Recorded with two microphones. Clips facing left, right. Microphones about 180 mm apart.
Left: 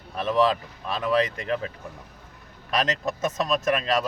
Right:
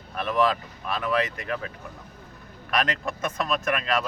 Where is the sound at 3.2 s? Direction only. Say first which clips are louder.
Left 3 dB; 20° left (ahead or behind).